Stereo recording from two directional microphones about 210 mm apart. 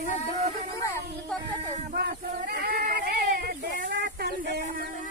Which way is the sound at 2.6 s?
45° right (ahead or behind).